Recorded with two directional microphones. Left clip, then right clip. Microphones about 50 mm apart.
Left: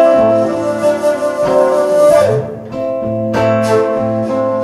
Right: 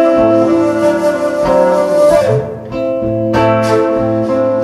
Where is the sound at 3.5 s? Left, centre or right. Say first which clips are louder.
Left 1 dB; right; by 4.6 s centre.